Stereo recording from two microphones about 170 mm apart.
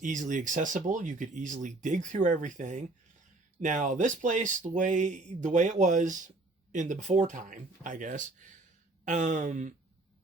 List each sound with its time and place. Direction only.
0.0 s speech: 50° right (ahead or behind)